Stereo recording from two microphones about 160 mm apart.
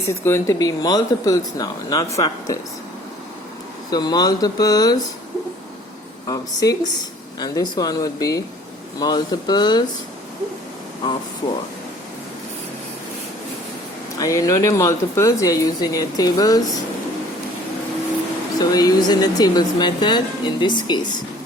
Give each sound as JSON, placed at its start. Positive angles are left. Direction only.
{"t": 0.1, "sound": "speech", "side_deg": 15}
{"t": 3.9, "sound": "speech", "side_deg": 25}
{"t": 6.2, "sound": "speech", "side_deg": 20}
{"t": 14.2, "sound": "speech", "side_deg": 20}
{"t": 18.6, "sound": "speech", "side_deg": 25}